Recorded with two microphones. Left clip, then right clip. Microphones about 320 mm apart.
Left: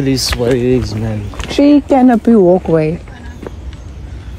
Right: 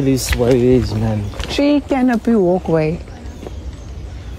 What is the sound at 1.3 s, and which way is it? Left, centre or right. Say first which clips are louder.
Speech: left 6 dB; centre.